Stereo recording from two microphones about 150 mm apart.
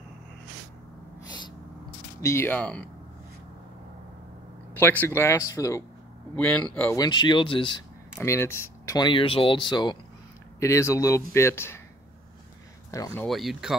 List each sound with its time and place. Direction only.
2.2 s speech: 15° left (ahead or behind)
4.7 s speech: 15° left (ahead or behind)
6.3 s speech: 10° left (ahead or behind)
6.9 s speech: 30° left (ahead or behind)
8.2 s speech: 15° left (ahead or behind)
10.6 s speech: 20° left (ahead or behind)
12.9 s speech: 15° left (ahead or behind)
13.3 s speech: centre (ahead or behind)